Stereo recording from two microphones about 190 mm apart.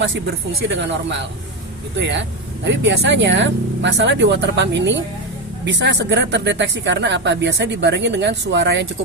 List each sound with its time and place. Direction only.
0.8 s speech: 70° right (ahead or behind)